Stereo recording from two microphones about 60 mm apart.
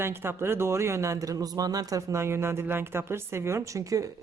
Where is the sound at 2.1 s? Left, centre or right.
Right.